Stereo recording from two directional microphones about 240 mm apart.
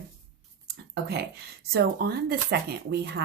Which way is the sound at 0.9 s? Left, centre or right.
Right.